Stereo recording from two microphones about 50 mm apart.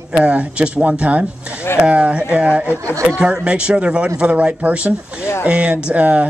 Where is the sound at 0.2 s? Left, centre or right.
Right.